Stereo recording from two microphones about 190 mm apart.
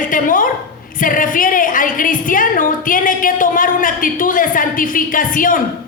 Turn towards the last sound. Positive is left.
turn(degrees=45)  # may be behind; listen again after turning